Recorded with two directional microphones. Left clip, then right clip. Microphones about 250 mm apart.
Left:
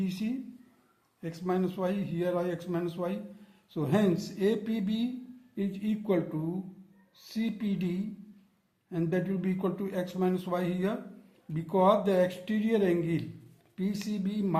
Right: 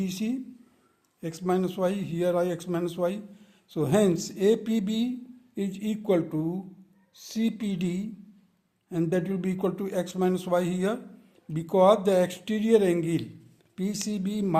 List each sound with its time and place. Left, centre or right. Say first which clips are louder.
0.0 s a man's voice: right 3 dB; right